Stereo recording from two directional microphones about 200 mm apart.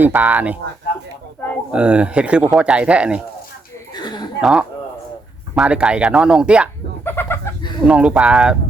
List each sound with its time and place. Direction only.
0.0 s speech: 10° right (ahead or behind)
1.7 s speech: 5° right (ahead or behind)
3.9 s a sound: 20° left (ahead or behind)
4.4 s speech: 5° right (ahead or behind)
7.0 s chicken: 10° left (ahead or behind)
7.9 s speech: 5° right (ahead or behind)